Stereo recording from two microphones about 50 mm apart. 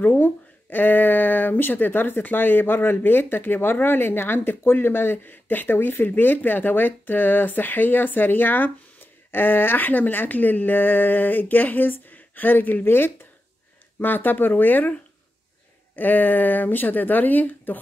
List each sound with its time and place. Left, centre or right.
0.0 s speech: left
12.8 s speech: left
13.9 s speech: left
16.0 s speech: left